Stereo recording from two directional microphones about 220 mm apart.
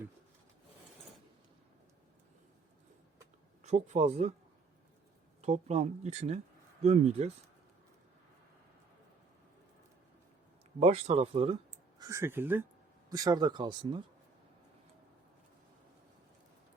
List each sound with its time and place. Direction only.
3.6 s speech: 30° right (ahead or behind)
5.4 s speech: 30° right (ahead or behind)
10.8 s speech: 30° right (ahead or behind)
11.7 s speech: 15° right (ahead or behind)